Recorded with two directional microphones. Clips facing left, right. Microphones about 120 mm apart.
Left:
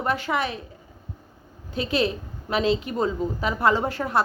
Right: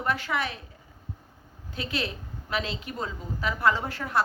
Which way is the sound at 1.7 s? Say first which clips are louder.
Left 8 dB; 20° left (ahead or behind).